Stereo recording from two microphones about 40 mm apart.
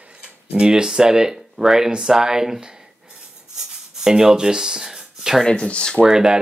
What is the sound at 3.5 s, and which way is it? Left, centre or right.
Rub, centre.